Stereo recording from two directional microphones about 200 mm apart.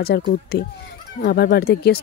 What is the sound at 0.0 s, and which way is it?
Speech, 50° left (ahead or behind).